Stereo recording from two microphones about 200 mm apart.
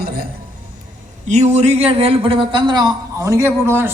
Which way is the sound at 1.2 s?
35° right (ahead or behind).